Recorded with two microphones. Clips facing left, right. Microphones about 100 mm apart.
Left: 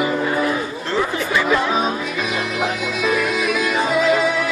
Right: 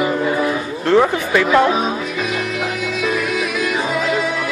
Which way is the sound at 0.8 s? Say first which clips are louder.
Right 9 dB; 60° right (ahead or behind).